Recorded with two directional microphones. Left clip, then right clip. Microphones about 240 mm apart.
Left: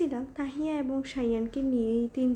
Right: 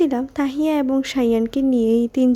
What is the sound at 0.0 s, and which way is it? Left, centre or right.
Speech, right.